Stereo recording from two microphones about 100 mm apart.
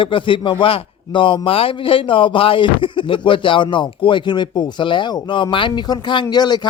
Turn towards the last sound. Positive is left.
turn(degrees=45)  # may be behind; listen again after turning